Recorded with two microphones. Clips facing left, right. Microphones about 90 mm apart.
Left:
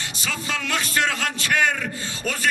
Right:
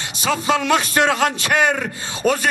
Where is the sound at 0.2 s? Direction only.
20° right (ahead or behind).